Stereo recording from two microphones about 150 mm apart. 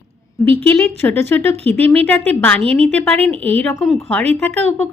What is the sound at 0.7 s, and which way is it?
Speech, 15° left (ahead or behind).